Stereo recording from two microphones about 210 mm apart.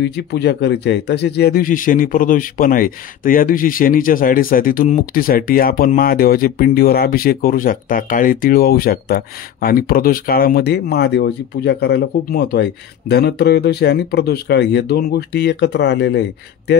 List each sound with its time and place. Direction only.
0.0 s speech: 55° left (ahead or behind)